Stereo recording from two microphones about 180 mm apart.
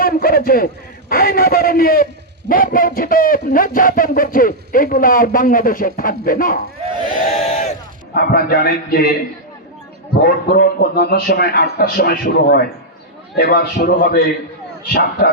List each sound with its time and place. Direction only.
0.0 s a sound: 55° left (ahead or behind)
1.1 s a man's voice: 55° left (ahead or behind)
7.3 s crowd: 40° left (ahead or behind)
8.1 s a man's voice: 55° left (ahead or behind)
10.2 s a man's voice: 60° left (ahead or behind)